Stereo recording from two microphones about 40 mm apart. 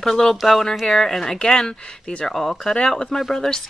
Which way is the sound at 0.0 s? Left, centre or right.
Centre.